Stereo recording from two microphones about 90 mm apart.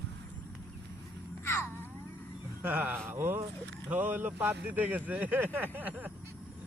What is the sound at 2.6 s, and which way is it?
Speech, 20° right (ahead or behind).